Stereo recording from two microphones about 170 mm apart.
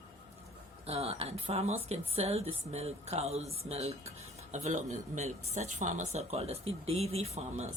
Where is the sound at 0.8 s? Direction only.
35° right (ahead or behind).